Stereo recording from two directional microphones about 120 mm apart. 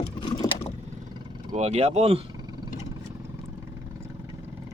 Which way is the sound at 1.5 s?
75° right (ahead or behind).